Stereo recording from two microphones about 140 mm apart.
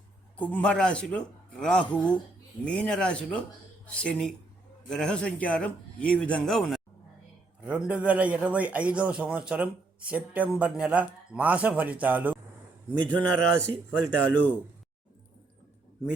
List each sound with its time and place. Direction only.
0.3 s a man's voice: 10° left (ahead or behind); by 12.4 s 10° right (ahead or behind)
13.1 s a man's voice: 10° left (ahead or behind)